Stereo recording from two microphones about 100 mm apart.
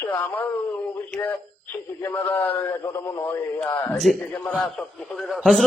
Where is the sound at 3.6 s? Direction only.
15° left (ahead or behind).